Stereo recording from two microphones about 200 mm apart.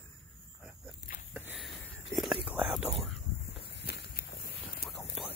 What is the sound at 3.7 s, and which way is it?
Walk, 60° left (ahead or behind).